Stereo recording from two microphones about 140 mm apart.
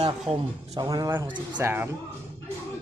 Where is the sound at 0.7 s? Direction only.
25° right (ahead or behind).